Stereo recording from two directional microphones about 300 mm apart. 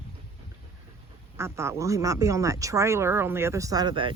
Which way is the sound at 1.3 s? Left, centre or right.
Centre.